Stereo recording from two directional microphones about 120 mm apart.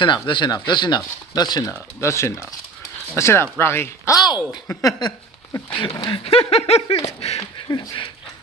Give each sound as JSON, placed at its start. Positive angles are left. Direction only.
{"t": 0.0, "sound": "speech", "side_deg": 40}
{"t": 5.8, "sound": "speech", "side_deg": 40}
{"t": 6.2, "sound": "a sound", "side_deg": 55}
{"t": 7.3, "sound": "speech", "side_deg": 35}